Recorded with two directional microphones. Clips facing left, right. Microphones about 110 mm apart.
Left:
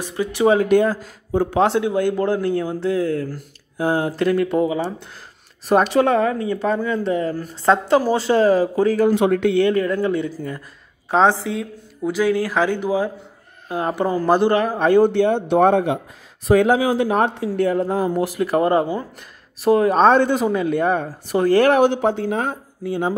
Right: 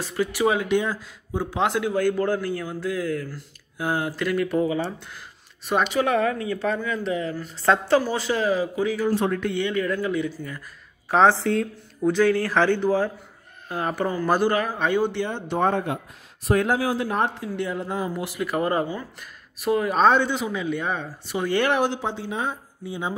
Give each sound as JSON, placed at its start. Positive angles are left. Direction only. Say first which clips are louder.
{"t": 0.0, "sound": "speech", "louder": "left 4 dB", "side_deg": 20}
{"t": 0.6, "sound": "speech", "louder": "left 7 dB", "side_deg": 45}
{"t": 1.6, "sound": "speech", "louder": "left 3 dB", "side_deg": 30}
{"t": 5.7, "sound": "speech", "louder": "left 6 dB", "side_deg": 40}
{"t": 6.8, "sound": "speech", "louder": "left 6 dB", "side_deg": 35}
{"t": 7.6, "sound": "speech", "louder": "left 4 dB", "side_deg": 20}
{"t": 8.0, "sound": "speech", "louder": "left 8 dB", "side_deg": 35}
{"t": 9.0, "sound": "speech", "louder": "left 7 dB", "side_deg": 70}
{"t": 9.6, "sound": "speech", "louder": "left 7 dB", "side_deg": 40}
{"t": 9.9, "sound": "speech", "louder": "left 5 dB", "side_deg": 30}
{"t": 11.1, "sound": "speech", "louder": "left 2 dB", "side_deg": 20}
{"t": 11.4, "sound": "speech", "louder": "right 2 dB", "side_deg": 5}
{"t": 15.2, "sound": "speech", "louder": "left 8 dB", "side_deg": 65}
{"t": 17.6, "sound": "speech", "louder": "left 9 dB", "side_deg": 45}